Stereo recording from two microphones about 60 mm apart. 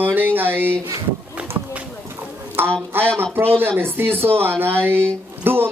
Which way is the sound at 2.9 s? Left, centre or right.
Right.